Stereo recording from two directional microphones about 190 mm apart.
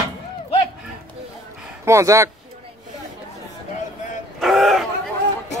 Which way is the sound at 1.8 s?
15° right (ahead or behind).